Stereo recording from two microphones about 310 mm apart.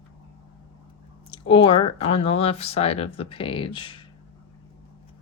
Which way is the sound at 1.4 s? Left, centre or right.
Centre.